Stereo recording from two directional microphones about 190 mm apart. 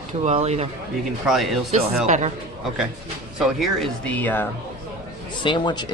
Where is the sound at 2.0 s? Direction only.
40° right (ahead or behind).